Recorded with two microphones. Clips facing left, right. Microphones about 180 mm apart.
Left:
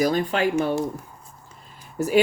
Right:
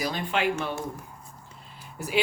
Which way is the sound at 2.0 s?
45° left (ahead or behind).